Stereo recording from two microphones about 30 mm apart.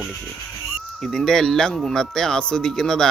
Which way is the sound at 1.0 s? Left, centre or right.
Centre.